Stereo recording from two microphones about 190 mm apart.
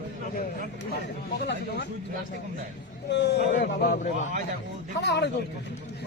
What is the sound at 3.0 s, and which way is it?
Speech, 65° left (ahead or behind).